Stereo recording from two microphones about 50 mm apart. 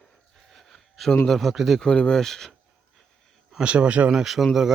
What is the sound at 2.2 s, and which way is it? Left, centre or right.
Speech, centre.